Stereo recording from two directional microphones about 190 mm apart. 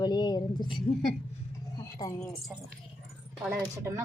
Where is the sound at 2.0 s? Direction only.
15° left (ahead or behind).